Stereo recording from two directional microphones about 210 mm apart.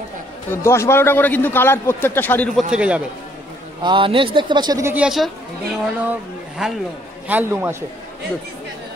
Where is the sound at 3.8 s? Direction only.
25° right (ahead or behind); by 5.3 s 5° right (ahead or behind).